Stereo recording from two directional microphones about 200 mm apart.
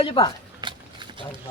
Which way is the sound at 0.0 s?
25° left (ahead or behind).